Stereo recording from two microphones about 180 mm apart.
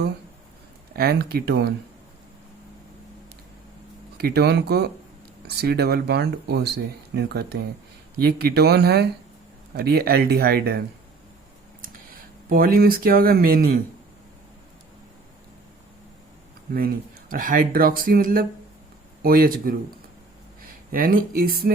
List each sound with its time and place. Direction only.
0.9 s speech: 60° right (ahead or behind)
4.2 s speech: 65° right (ahead or behind)
16.7 s speech: 50° right (ahead or behind)
20.9 s speech: 50° right (ahead or behind)